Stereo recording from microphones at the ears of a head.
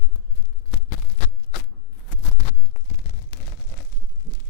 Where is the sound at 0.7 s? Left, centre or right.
Left.